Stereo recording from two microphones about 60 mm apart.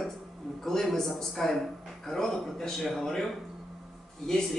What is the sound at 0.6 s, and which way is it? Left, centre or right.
A man's voice, centre.